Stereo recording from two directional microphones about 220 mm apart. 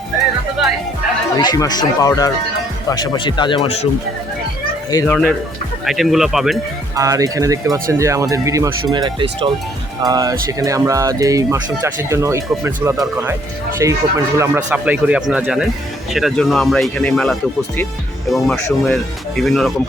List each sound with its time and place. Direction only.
1.4 s speech: 20° left (ahead or behind)
4.9 s speech: 10° left (ahead or behind)
6.9 s speech: 15° right (ahead or behind); by 19.9 s centre (ahead or behind)